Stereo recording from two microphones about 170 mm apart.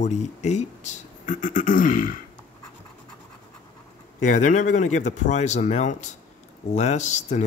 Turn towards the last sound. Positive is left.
turn(degrees=45)  # may be behind; listen again after turning